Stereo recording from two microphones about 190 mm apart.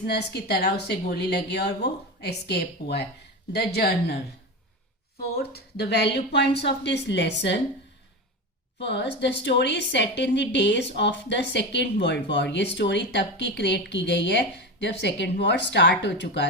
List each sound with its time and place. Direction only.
0.0 s a woman's voice: 60° left (ahead or behind)
5.4 s a woman's voice: 55° left (ahead or behind)
8.8 s a woman's voice: 65° left (ahead or behind)